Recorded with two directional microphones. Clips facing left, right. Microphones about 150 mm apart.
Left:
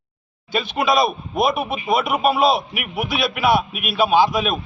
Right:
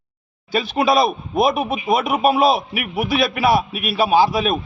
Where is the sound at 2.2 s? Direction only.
40° right (ahead or behind).